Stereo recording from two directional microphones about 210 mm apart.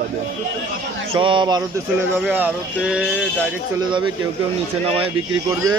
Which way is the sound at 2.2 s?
5° right (ahead or behind).